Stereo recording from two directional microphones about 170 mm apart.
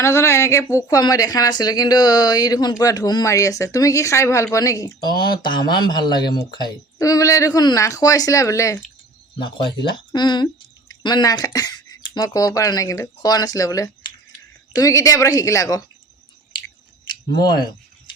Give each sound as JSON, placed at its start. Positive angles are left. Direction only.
{"t": 0.0, "sound": "a woman's voice", "side_deg": 15}